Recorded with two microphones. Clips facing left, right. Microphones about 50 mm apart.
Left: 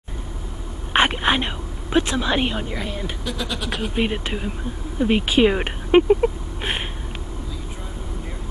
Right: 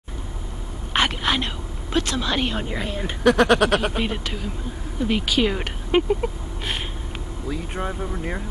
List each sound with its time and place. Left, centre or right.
0.9 s speech: left
2.5 s a woman's voice: centre
3.3 s speech: right
3.9 s speech: left
7.4 s vehicle: right